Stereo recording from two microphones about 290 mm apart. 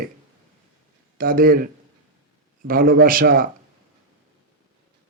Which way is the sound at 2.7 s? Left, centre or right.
Right.